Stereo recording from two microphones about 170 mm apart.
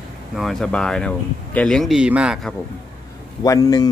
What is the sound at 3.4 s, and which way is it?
Speech, 20° left (ahead or behind).